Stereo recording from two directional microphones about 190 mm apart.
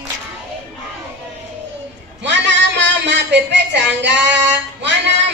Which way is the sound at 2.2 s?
70° right (ahead or behind).